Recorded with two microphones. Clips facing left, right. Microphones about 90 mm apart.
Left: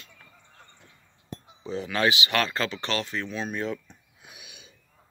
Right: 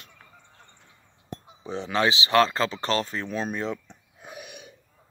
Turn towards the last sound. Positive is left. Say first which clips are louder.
# right 9 dB
turn(degrees=-55)  # may be behind; listen again after turning